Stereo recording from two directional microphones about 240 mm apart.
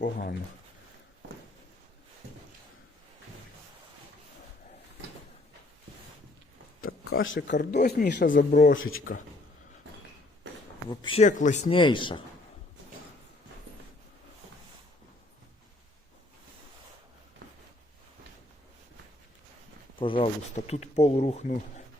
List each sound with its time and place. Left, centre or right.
0.0 s speech: left
7.1 s speech: left
8.7 s speech: left
10.8 s speech: left
20.0 s speech: left